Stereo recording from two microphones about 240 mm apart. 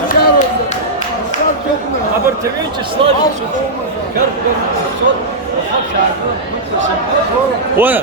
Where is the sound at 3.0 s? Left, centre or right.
Right.